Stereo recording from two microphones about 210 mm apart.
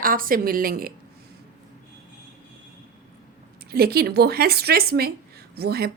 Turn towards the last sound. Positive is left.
turn(degrees=-50)  # may be behind; listen again after turning